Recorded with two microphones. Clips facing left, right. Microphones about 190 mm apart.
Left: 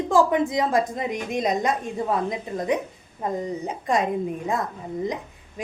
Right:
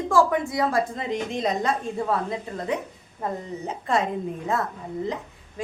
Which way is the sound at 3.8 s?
15° left (ahead or behind).